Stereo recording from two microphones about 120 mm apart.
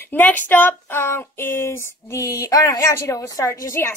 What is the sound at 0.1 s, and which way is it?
Child singing, 15° left (ahead or behind).